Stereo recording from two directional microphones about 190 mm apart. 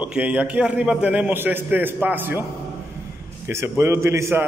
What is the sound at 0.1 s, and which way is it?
A man's voice, 5° right (ahead or behind).